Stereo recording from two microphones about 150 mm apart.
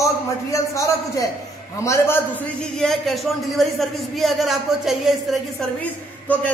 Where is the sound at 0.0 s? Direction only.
20° left (ahead or behind).